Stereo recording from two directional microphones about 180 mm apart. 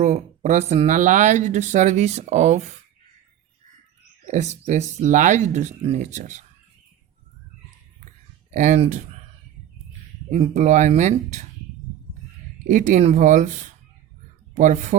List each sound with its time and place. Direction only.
0.0 s speech: 40° right (ahead or behind)
4.3 s speech: 45° right (ahead or behind)
8.4 s speech: 45° right (ahead or behind)
10.2 s speech: 35° right (ahead or behind)
12.6 s speech: 45° right (ahead or behind)